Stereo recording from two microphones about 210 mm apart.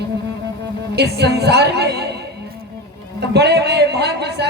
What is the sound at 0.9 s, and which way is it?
A woman's voice, 50° right (ahead or behind).